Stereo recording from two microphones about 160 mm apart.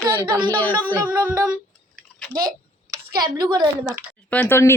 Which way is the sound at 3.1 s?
25° right (ahead or behind).